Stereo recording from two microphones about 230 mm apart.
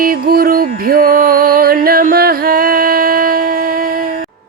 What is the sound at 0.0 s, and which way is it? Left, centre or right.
Music, right.